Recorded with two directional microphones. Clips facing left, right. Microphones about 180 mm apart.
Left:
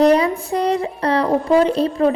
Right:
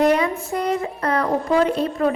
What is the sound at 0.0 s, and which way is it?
A woman's voice, 35° left (ahead or behind).